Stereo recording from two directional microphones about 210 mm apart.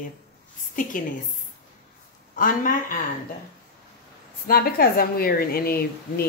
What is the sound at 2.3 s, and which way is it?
Speech, 40° left (ahead or behind).